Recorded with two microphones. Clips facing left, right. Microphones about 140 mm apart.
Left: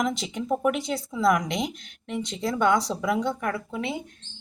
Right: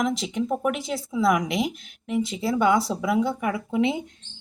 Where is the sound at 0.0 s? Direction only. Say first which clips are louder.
Right 3 dB; centre (ahead or behind).